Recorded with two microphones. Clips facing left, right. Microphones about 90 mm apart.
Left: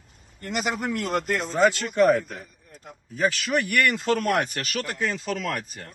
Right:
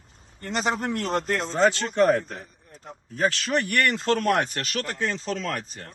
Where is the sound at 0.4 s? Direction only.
40° right (ahead or behind).